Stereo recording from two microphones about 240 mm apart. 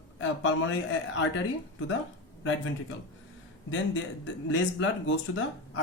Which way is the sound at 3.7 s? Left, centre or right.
Left.